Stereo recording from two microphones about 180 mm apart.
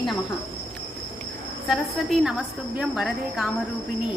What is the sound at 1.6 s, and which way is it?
A woman's voice, centre (ahead or behind).